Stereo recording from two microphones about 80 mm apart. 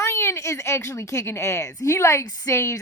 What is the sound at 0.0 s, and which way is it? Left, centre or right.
A woman's voice, left.